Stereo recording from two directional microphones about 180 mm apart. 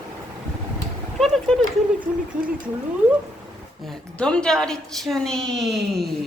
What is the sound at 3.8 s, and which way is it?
A woman's voice, 5° left (ahead or behind).